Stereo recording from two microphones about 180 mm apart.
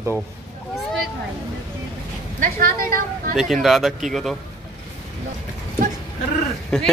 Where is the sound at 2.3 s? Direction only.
50° right (ahead or behind).